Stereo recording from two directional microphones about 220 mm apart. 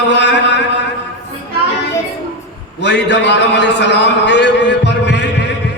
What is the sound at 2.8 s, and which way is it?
A man's voice, 50° left (ahead or behind).